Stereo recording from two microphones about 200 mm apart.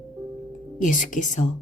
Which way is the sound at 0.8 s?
40° left (ahead or behind).